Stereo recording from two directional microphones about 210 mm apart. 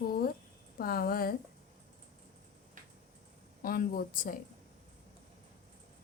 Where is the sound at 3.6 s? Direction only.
40° left (ahead or behind).